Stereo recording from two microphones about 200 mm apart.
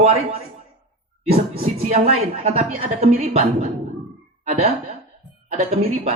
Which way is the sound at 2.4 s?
35° right (ahead or behind).